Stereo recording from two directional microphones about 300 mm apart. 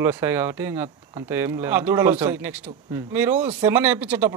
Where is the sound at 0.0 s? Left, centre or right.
Centre.